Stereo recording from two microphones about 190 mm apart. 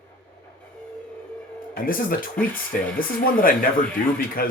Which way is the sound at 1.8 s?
50° left (ahead or behind).